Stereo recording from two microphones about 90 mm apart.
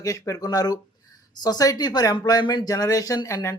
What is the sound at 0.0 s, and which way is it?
Speech, 40° left (ahead or behind).